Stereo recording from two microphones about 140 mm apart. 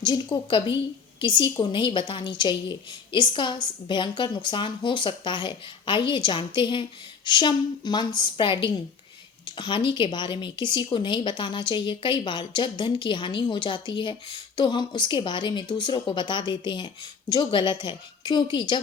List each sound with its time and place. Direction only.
0.0 s a woman's voice: 30° left (ahead or behind)